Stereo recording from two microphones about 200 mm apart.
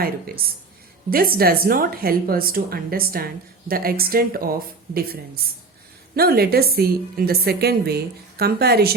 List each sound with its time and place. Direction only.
0.0 s a woman's voice: 50° right (ahead or behind)